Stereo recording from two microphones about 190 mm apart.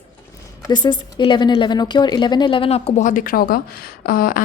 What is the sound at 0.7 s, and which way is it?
A woman's voice, 25° left (ahead or behind).